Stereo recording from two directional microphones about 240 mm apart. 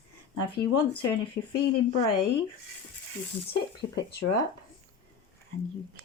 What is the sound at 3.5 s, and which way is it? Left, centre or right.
Speech, left.